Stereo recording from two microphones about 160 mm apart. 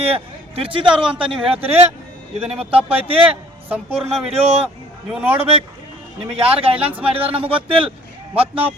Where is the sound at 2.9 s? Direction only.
35° right (ahead or behind).